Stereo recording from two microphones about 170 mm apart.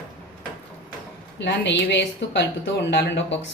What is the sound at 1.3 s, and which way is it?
Speech, 90° left.